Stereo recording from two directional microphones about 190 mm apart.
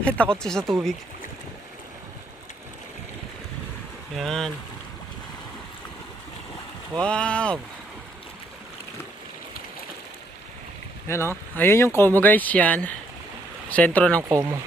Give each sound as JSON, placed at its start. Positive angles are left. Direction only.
{"t": 0.2, "sound": "speech", "side_deg": 5}
{"t": 4.2, "sound": "speech", "side_deg": 0}
{"t": 7.0, "sound": "speech", "side_deg": 5}
{"t": 11.1, "sound": "speech", "side_deg": 15}
{"t": 14.2, "sound": "speech", "side_deg": -15}